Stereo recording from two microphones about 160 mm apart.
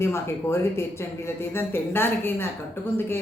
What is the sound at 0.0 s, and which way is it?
Speech, 15° left (ahead or behind).